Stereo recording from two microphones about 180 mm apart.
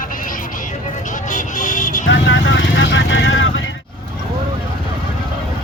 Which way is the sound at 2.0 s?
90° left.